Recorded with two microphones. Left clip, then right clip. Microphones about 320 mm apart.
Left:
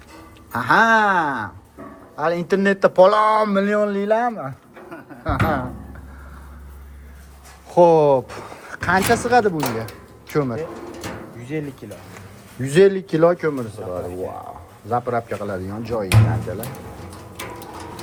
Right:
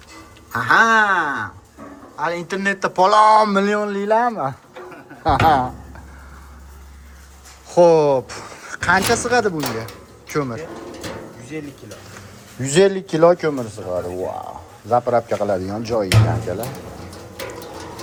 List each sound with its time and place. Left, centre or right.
0.5 s a man's voice: centre
7.7 s speech: centre
11.5 s speech: left
12.6 s a man's voice: centre